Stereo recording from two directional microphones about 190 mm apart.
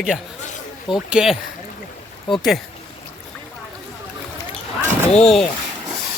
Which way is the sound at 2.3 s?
25° left (ahead or behind).